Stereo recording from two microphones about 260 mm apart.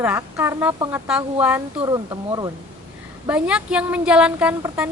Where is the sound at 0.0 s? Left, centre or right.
Centre.